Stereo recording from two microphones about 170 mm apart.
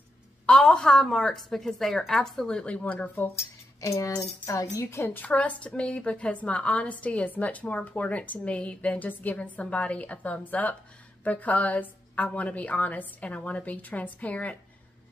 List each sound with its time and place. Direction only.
0.5 s a woman's voice: 5° left (ahead or behind)
3.8 s tambourine: 20° left (ahead or behind)
4.7 s a woman's voice: 15° left (ahead or behind)